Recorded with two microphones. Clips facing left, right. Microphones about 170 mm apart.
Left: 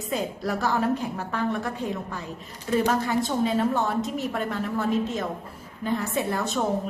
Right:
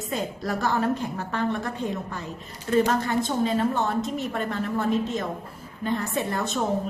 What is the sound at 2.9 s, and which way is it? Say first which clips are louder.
A woman's voice: even; 5° left (ahead or behind).